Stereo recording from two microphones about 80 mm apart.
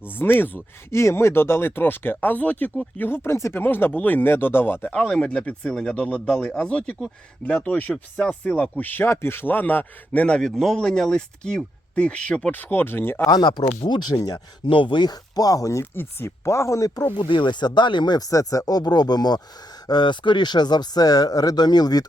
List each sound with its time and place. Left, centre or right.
0.1 s speech: left
4.9 s speech: centre
10.5 s speech: centre; by 13.2 s left
13.2 s speech: left
14.2 s speech: left
14.7 s speech: left
15.8 s speech: left
17.2 s speech: left
18.3 s speech: left
19.9 s speech: left